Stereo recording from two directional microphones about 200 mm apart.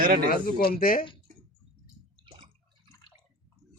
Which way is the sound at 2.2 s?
20° right (ahead or behind).